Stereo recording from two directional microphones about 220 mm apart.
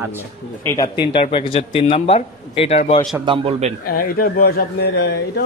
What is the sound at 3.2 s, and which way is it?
Speech, 25° right (ahead or behind).